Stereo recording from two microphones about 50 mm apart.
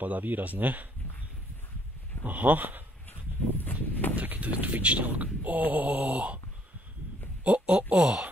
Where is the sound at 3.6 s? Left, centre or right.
Left.